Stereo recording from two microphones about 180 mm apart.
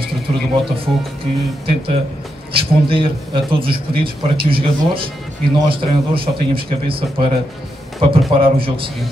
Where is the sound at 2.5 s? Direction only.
30° right (ahead or behind).